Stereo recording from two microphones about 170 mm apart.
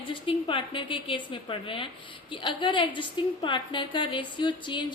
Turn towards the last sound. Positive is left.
turn(degrees=25)  # may be behind; listen again after turning